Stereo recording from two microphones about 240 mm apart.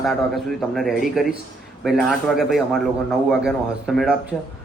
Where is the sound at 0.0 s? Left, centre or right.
Centre.